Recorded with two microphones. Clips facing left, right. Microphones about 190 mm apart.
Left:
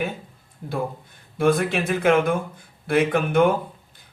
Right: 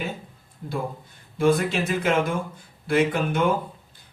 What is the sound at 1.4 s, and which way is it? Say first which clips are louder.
Speech: left 1 dB; 55° left (ahead or behind).